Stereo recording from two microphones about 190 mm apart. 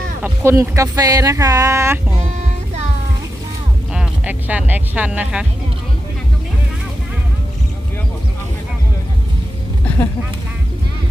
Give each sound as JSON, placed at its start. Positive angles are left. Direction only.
{"t": 0.2, "sound": "speech", "side_deg": -15}
{"t": 3.9, "sound": "speech", "side_deg": -10}